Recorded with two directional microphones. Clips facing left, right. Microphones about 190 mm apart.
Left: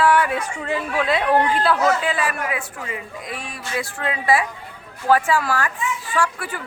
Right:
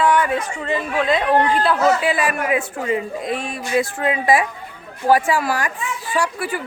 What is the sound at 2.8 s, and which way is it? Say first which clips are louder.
A man's voice: right 9 dB; 30° right (ahead or behind).